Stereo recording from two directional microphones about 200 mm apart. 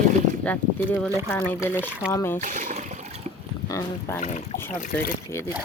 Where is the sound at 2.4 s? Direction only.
40° right (ahead or behind).